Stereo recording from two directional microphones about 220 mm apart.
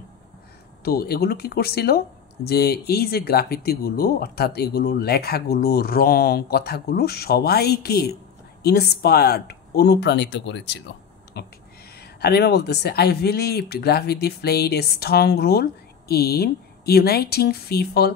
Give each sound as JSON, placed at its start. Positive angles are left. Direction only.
{"t": 0.8, "sound": "speech", "side_deg": 45}